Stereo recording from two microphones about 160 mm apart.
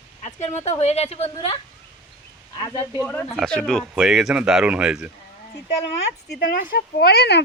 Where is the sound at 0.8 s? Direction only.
40° left (ahead or behind).